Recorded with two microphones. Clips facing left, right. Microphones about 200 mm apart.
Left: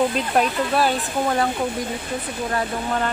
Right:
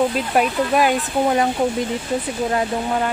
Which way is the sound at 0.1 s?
5° right (ahead or behind).